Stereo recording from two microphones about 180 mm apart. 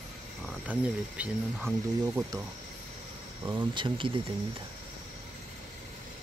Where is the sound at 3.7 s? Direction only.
25° right (ahead or behind).